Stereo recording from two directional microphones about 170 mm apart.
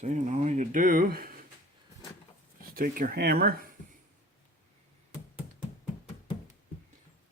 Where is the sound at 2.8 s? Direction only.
60° right (ahead or behind).